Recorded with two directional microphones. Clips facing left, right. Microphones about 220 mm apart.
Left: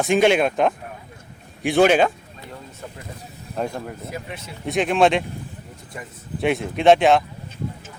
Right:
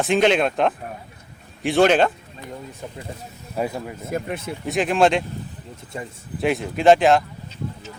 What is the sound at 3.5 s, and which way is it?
Speech, 5° right (ahead or behind).